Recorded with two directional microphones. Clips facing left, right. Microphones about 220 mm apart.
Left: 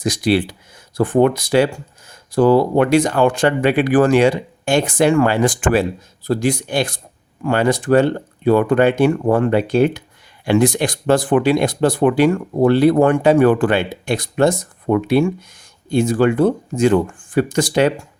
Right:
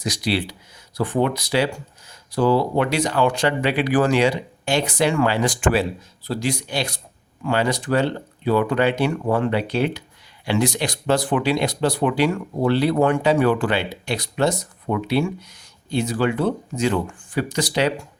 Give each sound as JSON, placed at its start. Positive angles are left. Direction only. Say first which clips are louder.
{"t": 0.0, "sound": "speech", "louder": "left 7 dB", "side_deg": 50}